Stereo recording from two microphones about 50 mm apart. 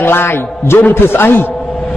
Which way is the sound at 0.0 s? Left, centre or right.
Left.